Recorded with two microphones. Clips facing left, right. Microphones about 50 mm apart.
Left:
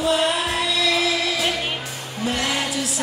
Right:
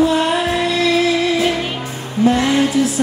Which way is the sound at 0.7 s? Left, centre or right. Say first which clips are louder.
Right 6 dB; right.